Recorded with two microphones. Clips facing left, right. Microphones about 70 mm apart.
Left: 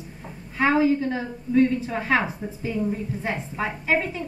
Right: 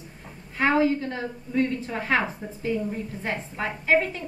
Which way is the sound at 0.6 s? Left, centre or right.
Centre.